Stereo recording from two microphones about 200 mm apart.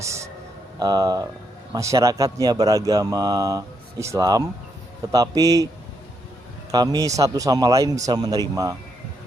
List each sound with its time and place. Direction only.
0.0 s a man's voice: 15° right (ahead or behind)
6.7 s speech: 20° right (ahead or behind)